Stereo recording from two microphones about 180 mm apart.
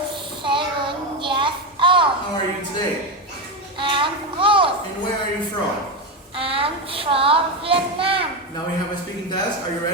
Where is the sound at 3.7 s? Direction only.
25° right (ahead or behind).